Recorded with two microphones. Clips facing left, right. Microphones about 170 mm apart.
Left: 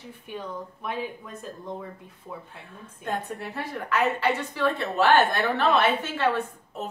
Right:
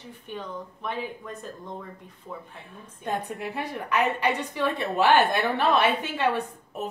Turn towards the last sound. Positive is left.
turn(degrees=-15)  # may be behind; listen again after turning